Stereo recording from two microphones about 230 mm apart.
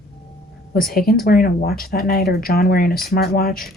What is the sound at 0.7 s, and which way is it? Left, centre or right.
Speech, left.